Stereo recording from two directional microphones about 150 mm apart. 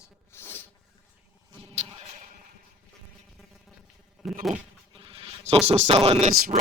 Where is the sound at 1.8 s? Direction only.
50° right (ahead or behind).